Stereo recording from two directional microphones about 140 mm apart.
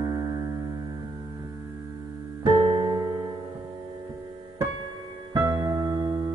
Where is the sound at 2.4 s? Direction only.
35° right (ahead or behind).